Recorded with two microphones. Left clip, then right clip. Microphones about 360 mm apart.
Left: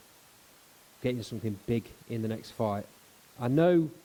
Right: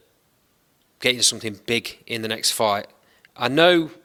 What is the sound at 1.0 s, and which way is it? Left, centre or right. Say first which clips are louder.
Speech: right 14 dB; centre.